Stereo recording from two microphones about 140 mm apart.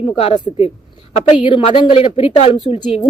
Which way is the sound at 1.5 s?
40° left (ahead or behind).